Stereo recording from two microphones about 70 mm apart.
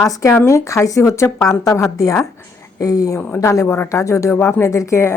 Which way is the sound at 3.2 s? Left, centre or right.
Left.